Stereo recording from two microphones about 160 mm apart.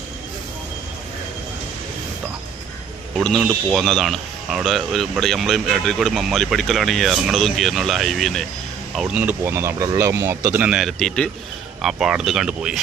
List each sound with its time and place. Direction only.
3.2 s speech: centre (ahead or behind)
9.4 s speech: 15° right (ahead or behind)